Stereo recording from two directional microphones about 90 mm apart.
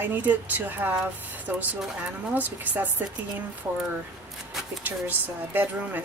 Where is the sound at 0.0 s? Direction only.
20° right (ahead or behind).